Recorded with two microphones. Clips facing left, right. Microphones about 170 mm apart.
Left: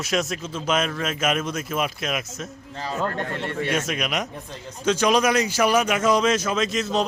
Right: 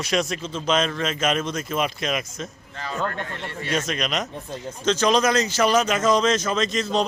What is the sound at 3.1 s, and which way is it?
Speech, 55° left (ahead or behind).